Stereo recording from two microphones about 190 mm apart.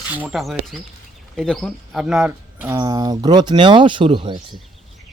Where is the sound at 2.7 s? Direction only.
20° right (ahead or behind).